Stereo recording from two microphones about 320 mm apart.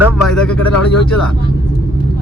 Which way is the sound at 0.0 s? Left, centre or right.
Centre.